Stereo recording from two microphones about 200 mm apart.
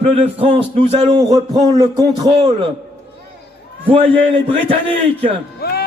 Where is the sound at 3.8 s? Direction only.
30° right (ahead or behind).